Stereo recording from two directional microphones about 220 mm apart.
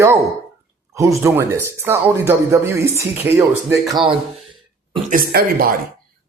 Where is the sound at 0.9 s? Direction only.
15° right (ahead or behind).